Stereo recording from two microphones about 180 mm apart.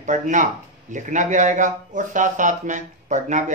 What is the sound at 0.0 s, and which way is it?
Speech, 45° right (ahead or behind).